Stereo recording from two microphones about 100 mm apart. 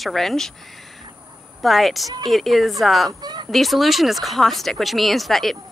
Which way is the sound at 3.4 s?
Centre (ahead or behind).